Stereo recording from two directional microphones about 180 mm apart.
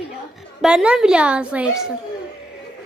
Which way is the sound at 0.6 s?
5° right (ahead or behind).